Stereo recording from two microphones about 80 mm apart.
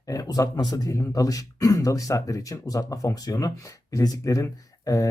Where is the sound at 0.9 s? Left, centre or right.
Left.